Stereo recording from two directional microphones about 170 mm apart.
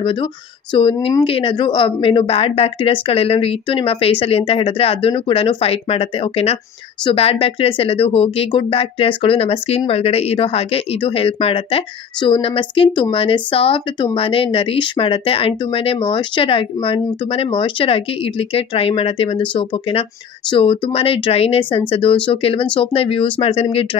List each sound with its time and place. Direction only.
0.0 s speech: 30° left (ahead or behind)